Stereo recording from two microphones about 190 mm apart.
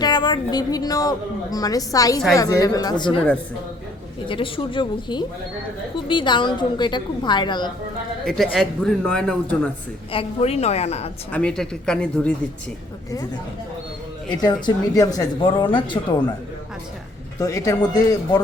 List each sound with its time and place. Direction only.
0.0 s a woman's voice: 20° left (ahead or behind)
4.3 s a woman's voice: 25° left (ahead or behind)
8.2 s speech: centre (ahead or behind)
10.1 s a woman's voice: 30° left (ahead or behind)
11.3 s speech: 5° left (ahead or behind)
14.3 s a woman's voice: 25° left (ahead or behind)
17.4 s speech: 15° left (ahead or behind)